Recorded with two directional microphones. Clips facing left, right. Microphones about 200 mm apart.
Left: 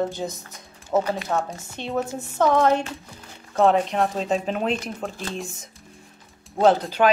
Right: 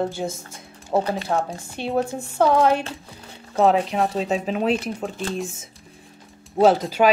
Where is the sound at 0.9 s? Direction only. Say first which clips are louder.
Right 1 dB; 15° right (ahead or behind).